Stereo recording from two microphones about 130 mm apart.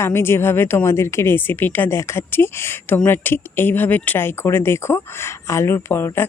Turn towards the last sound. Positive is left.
turn(degrees=20)  # may be behind; listen again after turning